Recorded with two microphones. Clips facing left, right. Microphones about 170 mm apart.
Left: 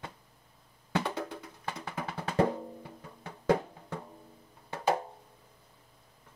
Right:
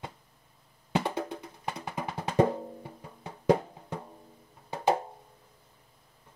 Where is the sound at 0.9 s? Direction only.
20° right (ahead or behind).